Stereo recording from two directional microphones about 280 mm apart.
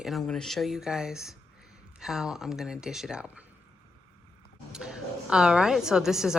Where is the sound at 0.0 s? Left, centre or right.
Centre.